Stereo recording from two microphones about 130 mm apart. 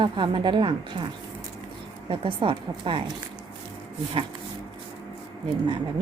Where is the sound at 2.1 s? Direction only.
40° right (ahead or behind).